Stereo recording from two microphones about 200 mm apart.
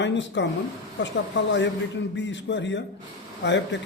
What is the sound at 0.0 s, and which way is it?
A man's voice, 65° left (ahead or behind).